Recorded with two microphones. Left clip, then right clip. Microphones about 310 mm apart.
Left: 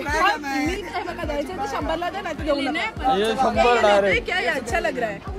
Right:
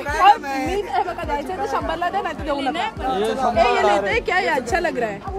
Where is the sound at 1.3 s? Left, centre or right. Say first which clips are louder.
Right 1 dB; centre.